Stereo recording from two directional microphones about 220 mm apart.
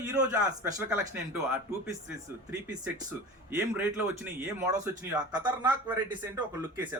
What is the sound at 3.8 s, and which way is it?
Speech, 10° right (ahead or behind).